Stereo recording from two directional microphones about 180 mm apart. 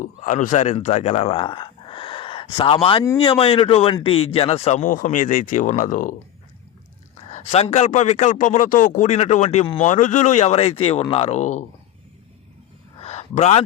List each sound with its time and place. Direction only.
0.0 s a man's voice: 40° left (ahead or behind)
7.3 s a man's voice: 40° left (ahead or behind)
13.0 s a sound: 35° left (ahead or behind)